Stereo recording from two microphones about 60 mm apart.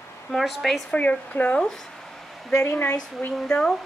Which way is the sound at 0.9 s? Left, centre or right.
Left.